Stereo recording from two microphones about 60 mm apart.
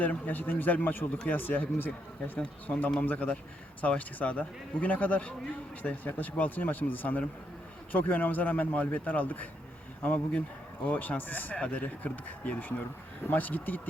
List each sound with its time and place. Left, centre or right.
0.0 s speech: left
11.5 s speech: centre